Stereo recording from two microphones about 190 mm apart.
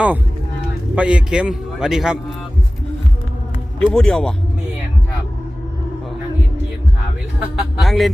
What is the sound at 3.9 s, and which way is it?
Speech, 5° left (ahead or behind).